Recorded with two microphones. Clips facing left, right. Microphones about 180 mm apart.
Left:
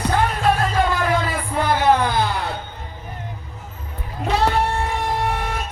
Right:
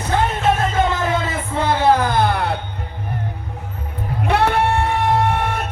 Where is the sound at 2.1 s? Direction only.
60° right (ahead or behind).